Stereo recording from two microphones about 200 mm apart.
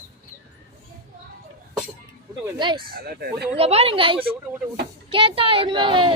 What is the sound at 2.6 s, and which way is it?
Speech, 25° right (ahead or behind).